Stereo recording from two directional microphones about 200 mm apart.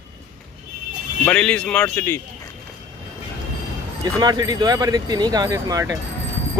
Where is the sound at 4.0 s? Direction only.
20° right (ahead or behind).